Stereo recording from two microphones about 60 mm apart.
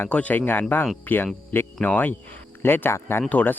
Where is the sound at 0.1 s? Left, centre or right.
Left.